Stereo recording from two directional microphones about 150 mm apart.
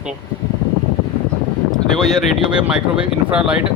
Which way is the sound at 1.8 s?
Centre (ahead or behind).